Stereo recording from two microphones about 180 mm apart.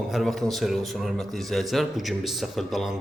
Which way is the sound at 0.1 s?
Centre (ahead or behind).